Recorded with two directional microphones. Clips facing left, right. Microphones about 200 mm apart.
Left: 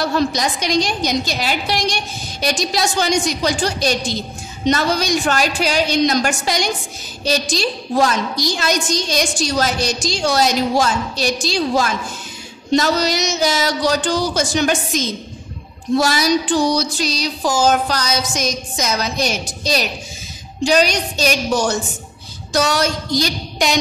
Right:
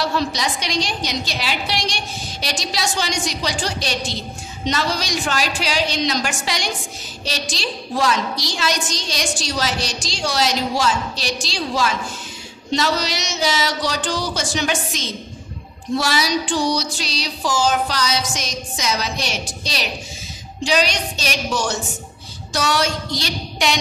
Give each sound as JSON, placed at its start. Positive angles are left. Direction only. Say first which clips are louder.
{"t": 0.1, "sound": "a woman's voice", "louder": "left 4 dB", "side_deg": 45}